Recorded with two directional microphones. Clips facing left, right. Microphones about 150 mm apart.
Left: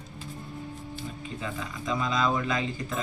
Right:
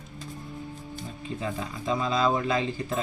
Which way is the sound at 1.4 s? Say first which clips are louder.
Right 3 dB; 30° right (ahead or behind).